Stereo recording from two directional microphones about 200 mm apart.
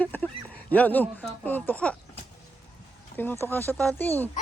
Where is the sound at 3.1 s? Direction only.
10° left (ahead or behind).